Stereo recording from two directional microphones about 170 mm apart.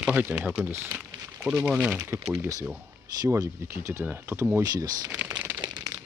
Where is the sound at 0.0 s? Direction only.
10° right (ahead or behind).